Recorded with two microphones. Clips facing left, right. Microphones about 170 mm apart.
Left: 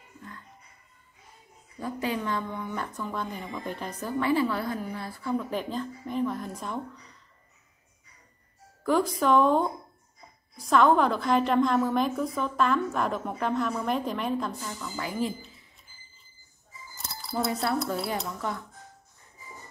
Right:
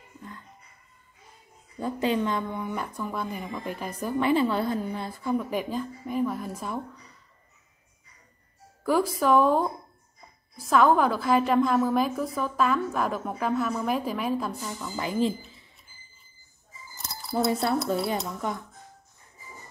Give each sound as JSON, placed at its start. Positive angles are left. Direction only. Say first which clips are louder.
{"t": 1.8, "sound": "speech", "louder": "right 5 dB", "side_deg": -25}
{"t": 8.8, "sound": "a woman's voice", "louder": "right 1 dB", "side_deg": -5}
{"t": 17.3, "sound": "speech", "louder": "right 3 dB", "side_deg": -25}